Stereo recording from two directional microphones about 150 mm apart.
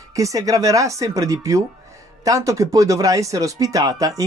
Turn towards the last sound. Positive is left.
turn(degrees=-25)  # may be behind; listen again after turning